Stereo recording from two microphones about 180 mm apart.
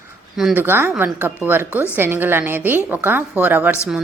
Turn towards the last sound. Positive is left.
turn(degrees=-10)  # may be behind; listen again after turning